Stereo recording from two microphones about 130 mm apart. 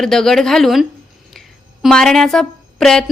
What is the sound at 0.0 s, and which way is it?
A woman's voice, 5° left (ahead or behind).